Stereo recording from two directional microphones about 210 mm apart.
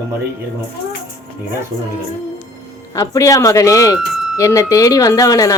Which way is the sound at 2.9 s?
15° left (ahead or behind).